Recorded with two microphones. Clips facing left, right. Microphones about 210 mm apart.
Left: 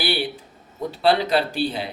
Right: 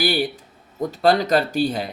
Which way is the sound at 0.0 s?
45° right (ahead or behind).